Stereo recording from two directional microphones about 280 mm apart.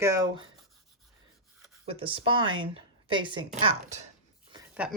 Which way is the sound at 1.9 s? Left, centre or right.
Centre.